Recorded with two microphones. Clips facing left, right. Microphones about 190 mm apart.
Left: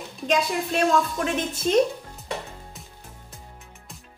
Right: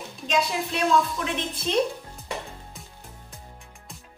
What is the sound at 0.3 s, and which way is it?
A woman's voice, 50° left (ahead or behind).